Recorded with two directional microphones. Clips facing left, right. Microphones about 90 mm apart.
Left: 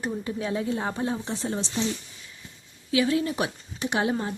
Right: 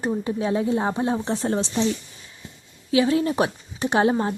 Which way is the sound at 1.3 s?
55° right (ahead or behind).